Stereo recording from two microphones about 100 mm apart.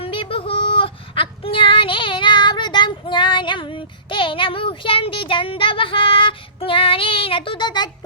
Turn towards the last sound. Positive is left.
turn(degrees=45)  # may be behind; listen again after turning